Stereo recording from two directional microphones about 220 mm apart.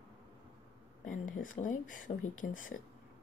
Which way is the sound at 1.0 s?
35° left (ahead or behind).